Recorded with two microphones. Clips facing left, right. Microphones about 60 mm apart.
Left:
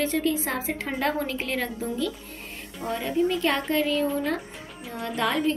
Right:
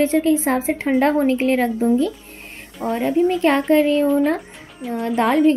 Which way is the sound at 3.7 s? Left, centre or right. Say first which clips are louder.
Right 10 dB; right.